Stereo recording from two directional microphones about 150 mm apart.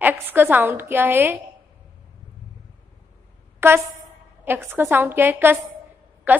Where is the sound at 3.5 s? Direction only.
15° right (ahead or behind).